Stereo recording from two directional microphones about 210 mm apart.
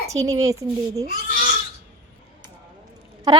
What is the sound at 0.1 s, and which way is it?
Speech, 15° right (ahead or behind).